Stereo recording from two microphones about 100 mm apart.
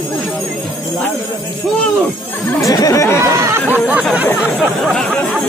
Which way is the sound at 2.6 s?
35° left (ahead or behind).